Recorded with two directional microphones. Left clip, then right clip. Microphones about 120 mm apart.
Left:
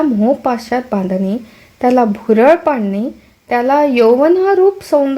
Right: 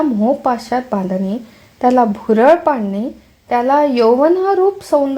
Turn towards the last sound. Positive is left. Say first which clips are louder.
# left 2 dB
turn(degrees=20)  # may be behind; listen again after turning